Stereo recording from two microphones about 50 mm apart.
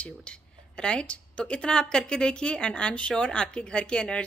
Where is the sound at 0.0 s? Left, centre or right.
Centre.